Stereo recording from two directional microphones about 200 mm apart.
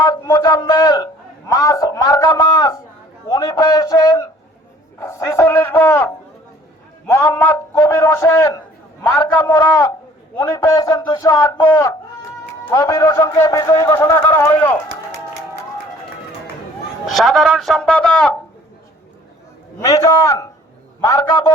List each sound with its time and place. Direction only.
0.0 s a man's voice: 20° left (ahead or behind)
9.4 s a man's voice: 15° left (ahead or behind)
17.2 s speech: centre (ahead or behind)
19.8 s a man's voice: 15° left (ahead or behind)